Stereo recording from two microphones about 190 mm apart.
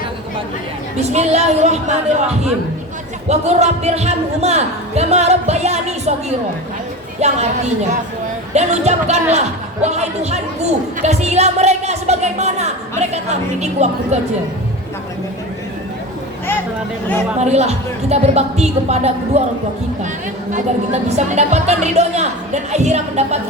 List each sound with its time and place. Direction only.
0.9 s a woman's voice: 35° right (ahead or behind)
7.2 s a woman's voice: 35° right (ahead or behind)
8.5 s a woman's voice: 35° right (ahead or behind)
17.4 s a woman's voice: 35° right (ahead or behind)
20.5 s a woman's voice: 40° right (ahead or behind)